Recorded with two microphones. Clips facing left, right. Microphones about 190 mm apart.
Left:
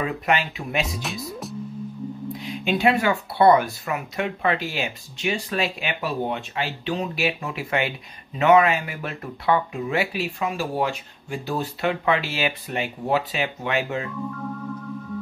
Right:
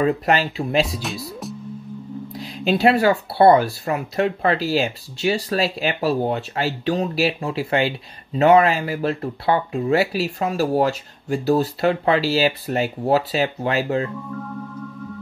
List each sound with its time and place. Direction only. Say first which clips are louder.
0.0 s speech: right 5 dB; 35° right (ahead or behind)
2.3 s speech: right 5 dB; 35° right (ahead or behind)